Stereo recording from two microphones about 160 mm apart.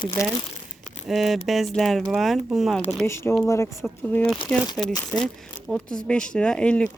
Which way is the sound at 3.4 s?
15° left (ahead or behind).